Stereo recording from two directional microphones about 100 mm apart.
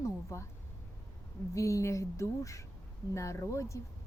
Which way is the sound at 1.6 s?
30° left (ahead or behind).